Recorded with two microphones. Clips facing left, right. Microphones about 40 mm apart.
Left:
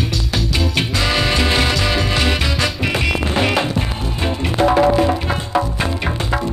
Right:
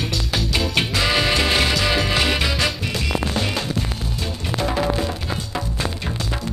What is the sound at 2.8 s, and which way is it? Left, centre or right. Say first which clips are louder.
Music: left 5 dB; left.